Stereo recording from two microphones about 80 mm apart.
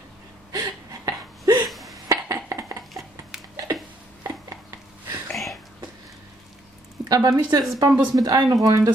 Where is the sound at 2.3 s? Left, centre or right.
Right.